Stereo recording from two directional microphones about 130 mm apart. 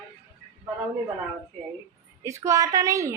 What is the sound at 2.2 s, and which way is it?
Speech, 25° right (ahead or behind).